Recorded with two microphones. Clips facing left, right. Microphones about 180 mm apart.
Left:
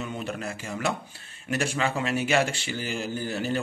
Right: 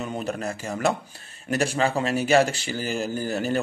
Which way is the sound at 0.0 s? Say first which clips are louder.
Right 4 dB; 40° right (ahead or behind).